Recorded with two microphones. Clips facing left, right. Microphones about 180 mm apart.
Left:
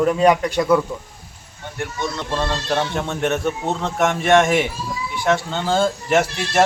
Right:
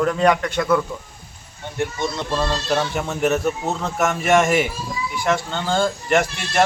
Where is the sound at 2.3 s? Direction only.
5° right (ahead or behind).